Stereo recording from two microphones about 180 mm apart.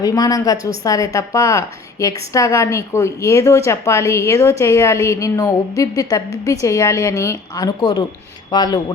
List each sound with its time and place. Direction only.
0.0 s a woman's voice: 20° left (ahead or behind)